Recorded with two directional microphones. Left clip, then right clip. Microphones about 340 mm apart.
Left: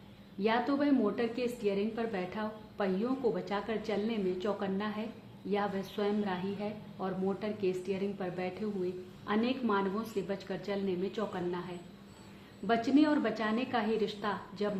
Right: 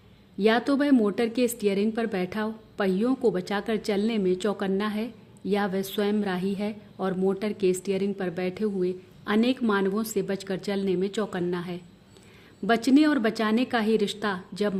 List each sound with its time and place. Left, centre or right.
0.3 s a woman's voice: right